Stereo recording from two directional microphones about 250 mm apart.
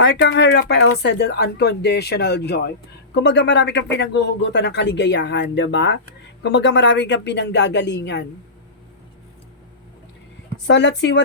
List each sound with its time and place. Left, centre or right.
0.0 s speech: left
10.7 s speech: left